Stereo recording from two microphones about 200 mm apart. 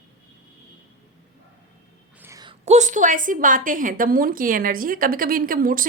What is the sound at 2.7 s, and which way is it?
A woman's voice, 35° right (ahead or behind).